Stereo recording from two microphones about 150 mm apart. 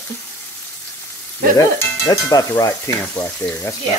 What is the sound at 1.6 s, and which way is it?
Sizzle, 20° left (ahead or behind).